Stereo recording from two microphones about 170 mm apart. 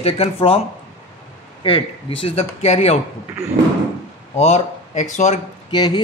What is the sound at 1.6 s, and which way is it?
Speech, 30° left (ahead or behind).